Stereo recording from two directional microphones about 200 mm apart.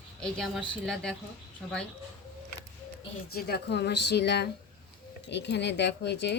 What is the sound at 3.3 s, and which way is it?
Speech, 50° left (ahead or behind).